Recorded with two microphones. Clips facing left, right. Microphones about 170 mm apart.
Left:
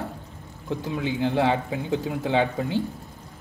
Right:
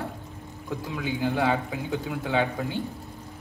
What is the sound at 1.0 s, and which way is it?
Speech, 30° left (ahead or behind).